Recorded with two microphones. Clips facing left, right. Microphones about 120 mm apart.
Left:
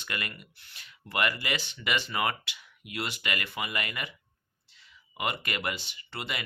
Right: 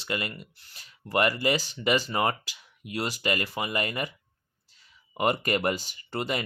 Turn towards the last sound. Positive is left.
turn(degrees=-40)  # may be behind; listen again after turning